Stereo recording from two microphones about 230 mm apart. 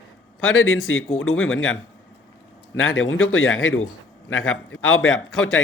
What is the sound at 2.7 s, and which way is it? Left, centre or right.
Speech, left.